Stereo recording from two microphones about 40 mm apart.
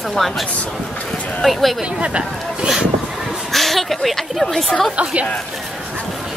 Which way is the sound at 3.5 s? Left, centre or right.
Centre.